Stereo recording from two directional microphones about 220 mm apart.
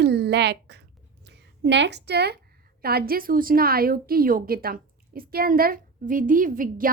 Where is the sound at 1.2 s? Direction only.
50° right (ahead or behind).